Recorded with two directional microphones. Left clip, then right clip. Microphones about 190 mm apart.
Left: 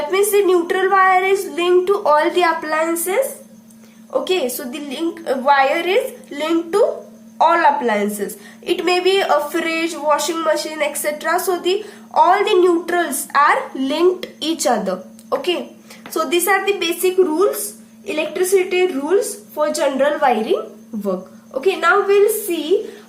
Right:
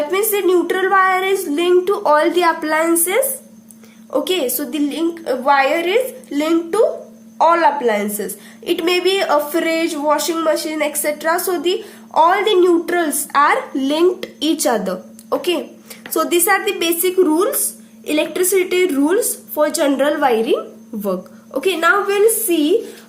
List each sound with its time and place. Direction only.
0.1 s a woman's voice: 20° right (ahead or behind)